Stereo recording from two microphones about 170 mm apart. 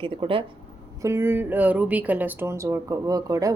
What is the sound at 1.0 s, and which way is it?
A woman's voice, 15° right (ahead or behind).